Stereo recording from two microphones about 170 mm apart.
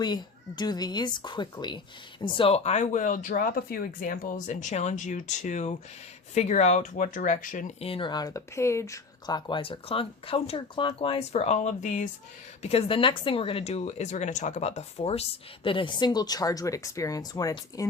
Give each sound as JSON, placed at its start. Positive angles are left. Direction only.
{"t": 0.0, "sound": "speech", "side_deg": 25}
{"t": 7.8, "sound": "speech", "side_deg": 35}
{"t": 12.6, "sound": "speech", "side_deg": 35}